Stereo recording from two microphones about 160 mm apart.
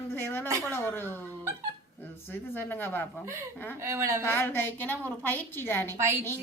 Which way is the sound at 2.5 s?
15° left (ahead or behind).